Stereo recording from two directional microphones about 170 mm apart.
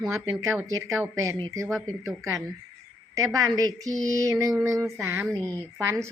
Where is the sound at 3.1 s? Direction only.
20° right (ahead or behind).